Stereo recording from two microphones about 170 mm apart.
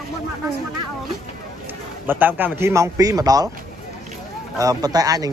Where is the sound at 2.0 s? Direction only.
10° right (ahead or behind).